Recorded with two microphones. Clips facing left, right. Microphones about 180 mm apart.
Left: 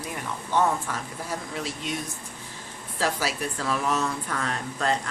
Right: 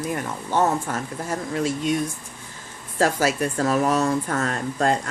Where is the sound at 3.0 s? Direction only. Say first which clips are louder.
Right 7 dB; 45° right (ahead or behind).